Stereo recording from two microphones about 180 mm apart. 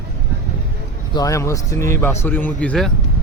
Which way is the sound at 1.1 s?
20° left (ahead or behind).